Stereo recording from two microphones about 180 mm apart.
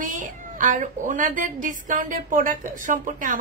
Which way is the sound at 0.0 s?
45° right (ahead or behind).